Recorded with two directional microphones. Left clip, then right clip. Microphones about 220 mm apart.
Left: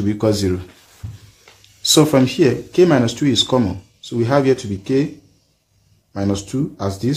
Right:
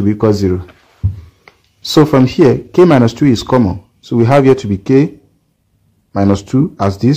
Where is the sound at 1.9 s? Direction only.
20° right (ahead or behind).